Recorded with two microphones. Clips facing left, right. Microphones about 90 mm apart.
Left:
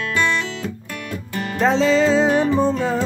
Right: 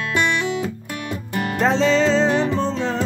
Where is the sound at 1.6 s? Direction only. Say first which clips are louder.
Left 1 dB; centre (ahead or behind).